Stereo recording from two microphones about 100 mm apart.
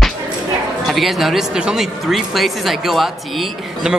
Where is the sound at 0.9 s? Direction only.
Centre (ahead or behind).